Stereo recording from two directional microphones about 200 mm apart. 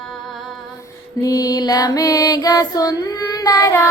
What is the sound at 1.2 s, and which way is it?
Music, 20° left (ahead or behind).